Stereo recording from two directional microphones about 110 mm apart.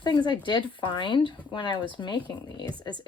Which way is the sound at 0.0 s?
40° left (ahead or behind).